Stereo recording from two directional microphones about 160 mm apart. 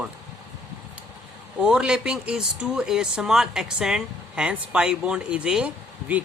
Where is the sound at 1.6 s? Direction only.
5° right (ahead or behind).